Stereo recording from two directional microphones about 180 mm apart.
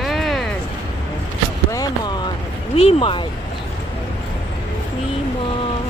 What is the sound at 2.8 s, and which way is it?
Speech, 30° left (ahead or behind).